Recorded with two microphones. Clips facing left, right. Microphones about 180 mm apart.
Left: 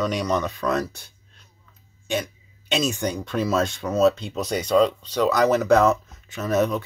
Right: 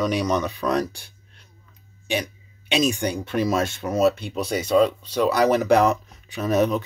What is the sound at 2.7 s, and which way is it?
Speech, 15° right (ahead or behind).